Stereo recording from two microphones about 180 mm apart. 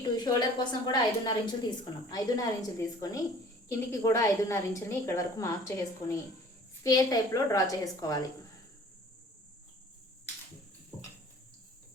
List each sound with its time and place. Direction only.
0.2 s a woman's voice: 25° left (ahead or behind)